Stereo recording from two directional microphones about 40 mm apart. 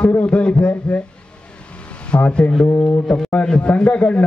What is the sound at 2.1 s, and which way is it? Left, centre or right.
A man's voice, left.